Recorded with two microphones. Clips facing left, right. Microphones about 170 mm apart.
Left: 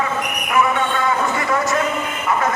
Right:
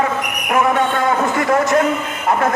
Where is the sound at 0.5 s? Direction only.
50° right (ahead or behind).